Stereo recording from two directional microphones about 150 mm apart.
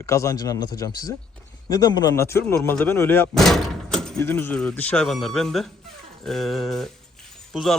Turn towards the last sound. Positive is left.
turn(degrees=0)  # may be behind; listen again after turning